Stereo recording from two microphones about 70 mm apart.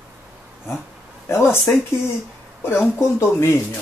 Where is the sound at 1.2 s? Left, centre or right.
Left.